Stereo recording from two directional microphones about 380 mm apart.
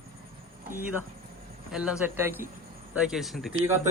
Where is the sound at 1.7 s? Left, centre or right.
Centre.